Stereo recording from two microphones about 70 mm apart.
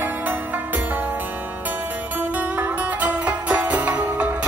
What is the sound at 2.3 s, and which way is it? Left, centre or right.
Music, right.